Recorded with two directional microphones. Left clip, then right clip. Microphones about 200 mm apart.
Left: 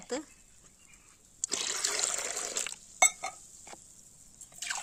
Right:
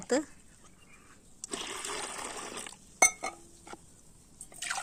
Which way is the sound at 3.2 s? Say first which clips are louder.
Right 1 dB; 10° right (ahead or behind).